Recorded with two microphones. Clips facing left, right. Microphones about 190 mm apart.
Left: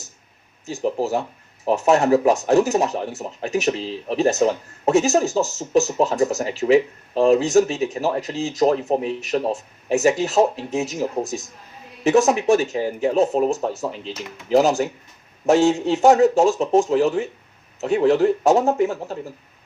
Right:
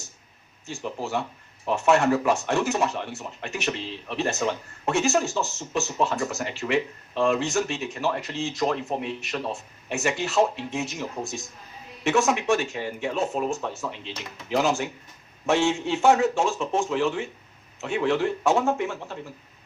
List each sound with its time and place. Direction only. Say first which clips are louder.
0.6 s speech: left 9 dB; 40° left (ahead or behind)